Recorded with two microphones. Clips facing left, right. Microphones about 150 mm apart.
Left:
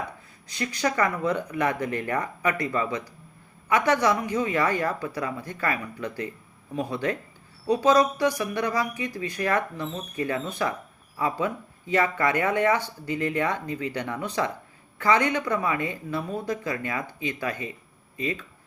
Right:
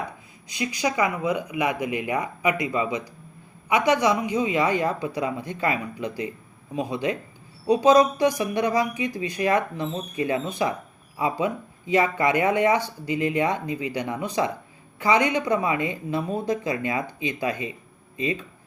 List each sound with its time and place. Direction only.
0.4 s speech: 15° right (ahead or behind)